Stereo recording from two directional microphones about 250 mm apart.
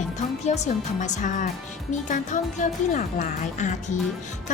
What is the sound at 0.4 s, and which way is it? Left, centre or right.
Speech, left.